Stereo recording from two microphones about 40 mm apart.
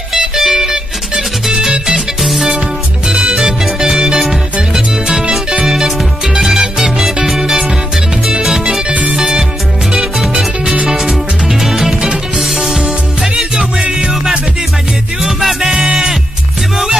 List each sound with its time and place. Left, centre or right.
0.4 s music: centre
4.7 s music: centre
7.2 s music: centre
8.9 s music: right
9.9 s music: centre
10.6 s music: right
11.1 s music: centre
12.5 s music: centre
13.8 s music: right
15.2 s music: centre